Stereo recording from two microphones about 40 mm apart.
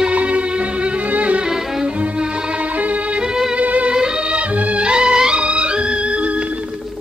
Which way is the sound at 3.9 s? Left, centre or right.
Centre.